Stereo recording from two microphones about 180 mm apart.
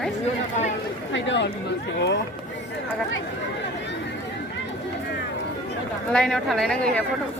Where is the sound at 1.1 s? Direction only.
80° left.